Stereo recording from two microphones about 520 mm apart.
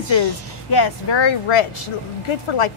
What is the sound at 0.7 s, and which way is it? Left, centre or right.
A woman's voice, left.